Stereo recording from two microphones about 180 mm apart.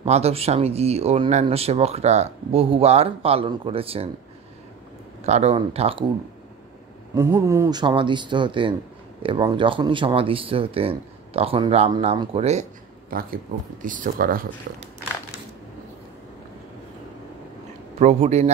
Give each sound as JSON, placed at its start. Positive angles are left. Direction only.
{"t": 0.0, "sound": "speech", "side_deg": -35}
{"t": 5.2, "sound": "speech", "side_deg": -40}
{"t": 7.2, "sound": "speech", "side_deg": -15}
{"t": 13.1, "sound": "speech", "side_deg": -55}
{"t": 17.9, "sound": "speech", "side_deg": -40}